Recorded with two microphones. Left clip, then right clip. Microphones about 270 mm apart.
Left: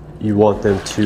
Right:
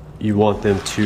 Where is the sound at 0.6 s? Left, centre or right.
Right.